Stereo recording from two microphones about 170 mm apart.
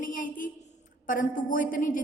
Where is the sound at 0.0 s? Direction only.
50° left (ahead or behind).